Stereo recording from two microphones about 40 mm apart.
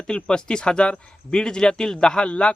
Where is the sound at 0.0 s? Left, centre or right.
Left.